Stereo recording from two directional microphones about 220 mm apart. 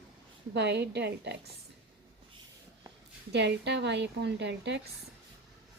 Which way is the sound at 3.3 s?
50° right (ahead or behind).